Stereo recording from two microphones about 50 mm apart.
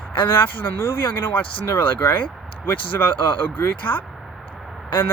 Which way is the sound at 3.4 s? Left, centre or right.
Left.